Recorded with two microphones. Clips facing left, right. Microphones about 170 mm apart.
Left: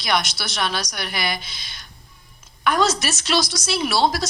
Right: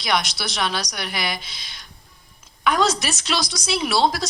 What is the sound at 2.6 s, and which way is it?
Speech, 5° left (ahead or behind).